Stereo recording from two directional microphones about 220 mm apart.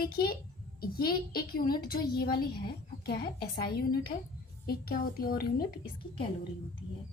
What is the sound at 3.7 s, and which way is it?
A woman's voice, 45° left (ahead or behind).